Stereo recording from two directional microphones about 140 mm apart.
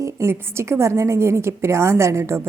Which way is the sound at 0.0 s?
20° right (ahead or behind).